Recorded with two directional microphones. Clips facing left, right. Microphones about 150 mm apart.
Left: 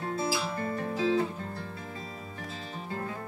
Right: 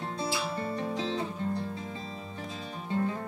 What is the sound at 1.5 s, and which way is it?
Music, 25° right (ahead or behind).